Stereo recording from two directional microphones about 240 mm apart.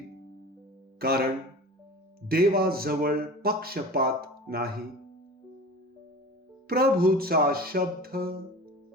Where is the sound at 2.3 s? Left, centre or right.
Right.